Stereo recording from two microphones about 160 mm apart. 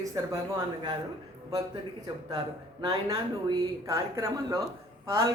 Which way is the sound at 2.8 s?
20° right (ahead or behind).